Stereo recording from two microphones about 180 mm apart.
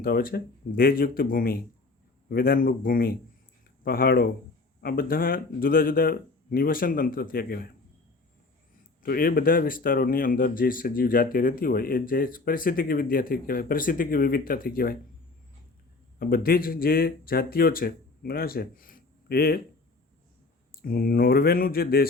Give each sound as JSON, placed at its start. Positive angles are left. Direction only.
{"t": 0.0, "sound": "speech", "side_deg": 55}
{"t": 9.0, "sound": "speech", "side_deg": 55}
{"t": 16.1, "sound": "speech", "side_deg": 55}
{"t": 20.8, "sound": "speech", "side_deg": 55}